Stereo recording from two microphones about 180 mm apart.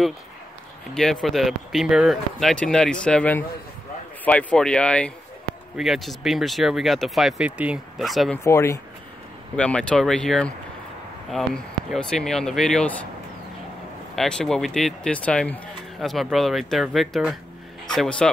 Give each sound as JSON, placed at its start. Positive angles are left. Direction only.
{"t": 1.2, "sound": "speech", "side_deg": 0}
{"t": 8.5, "sound": "speech", "side_deg": 15}
{"t": 14.1, "sound": "speech", "side_deg": 0}